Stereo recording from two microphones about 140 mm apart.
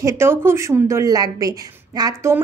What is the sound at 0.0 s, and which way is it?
A woman's voice, 15° right (ahead or behind).